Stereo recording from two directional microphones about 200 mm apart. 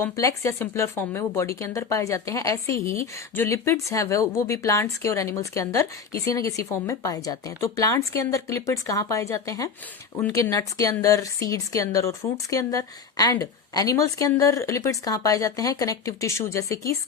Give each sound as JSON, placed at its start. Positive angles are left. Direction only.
{"t": 0.0, "sound": "speech", "side_deg": 15}